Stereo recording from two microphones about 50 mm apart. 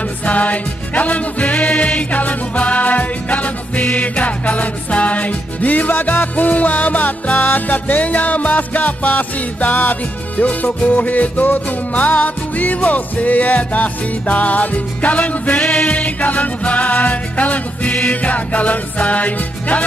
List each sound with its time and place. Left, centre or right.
0.2 s music: left